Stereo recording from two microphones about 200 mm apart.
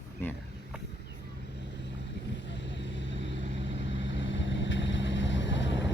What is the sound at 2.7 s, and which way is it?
Vehicle, 65° left (ahead or behind).